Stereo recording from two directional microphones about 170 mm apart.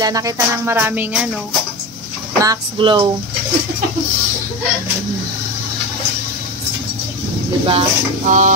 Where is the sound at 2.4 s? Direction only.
25° right (ahead or behind).